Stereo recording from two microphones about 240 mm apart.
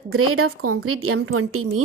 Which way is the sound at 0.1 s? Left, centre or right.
Right.